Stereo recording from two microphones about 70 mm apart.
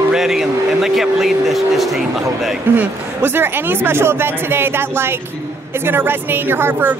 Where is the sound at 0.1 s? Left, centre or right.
Centre.